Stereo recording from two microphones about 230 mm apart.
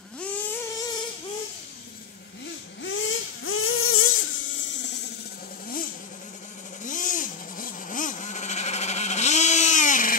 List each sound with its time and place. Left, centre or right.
0.2 s vehicle: centre
2.4 s vehicle: left
6.8 s vehicle: left